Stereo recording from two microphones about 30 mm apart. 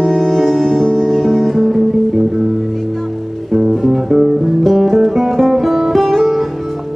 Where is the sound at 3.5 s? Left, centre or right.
Centre.